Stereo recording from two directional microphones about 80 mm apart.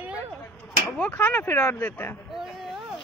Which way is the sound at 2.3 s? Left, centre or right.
Centre.